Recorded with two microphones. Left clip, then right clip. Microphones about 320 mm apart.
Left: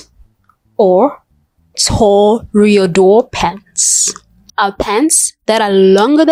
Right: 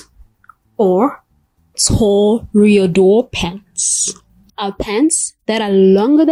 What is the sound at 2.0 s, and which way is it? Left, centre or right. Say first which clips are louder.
Speech: left 4 dB; left.